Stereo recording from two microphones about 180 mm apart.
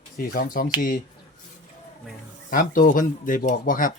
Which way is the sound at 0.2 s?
55° left (ahead or behind).